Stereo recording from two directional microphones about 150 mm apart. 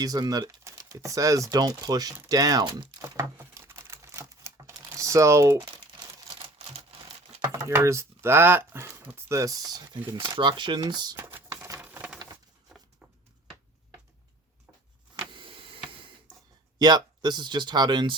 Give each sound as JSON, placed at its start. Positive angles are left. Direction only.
{"t": 0.0, "sound": "speech", "side_deg": -25}
{"t": 2.3, "sound": "crumpling", "side_deg": -25}
{"t": 7.4, "sound": "speech", "side_deg": -20}
{"t": 11.3, "sound": "a sound", "side_deg": -15}
{"t": 15.1, "sound": "power windows", "side_deg": -35}
{"t": 16.7, "sound": "speech", "side_deg": -30}